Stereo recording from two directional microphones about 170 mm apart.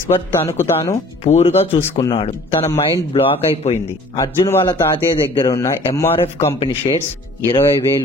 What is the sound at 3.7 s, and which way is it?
Speech, 20° left (ahead or behind).